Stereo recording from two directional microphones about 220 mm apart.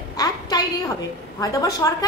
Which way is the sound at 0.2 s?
15° left (ahead or behind).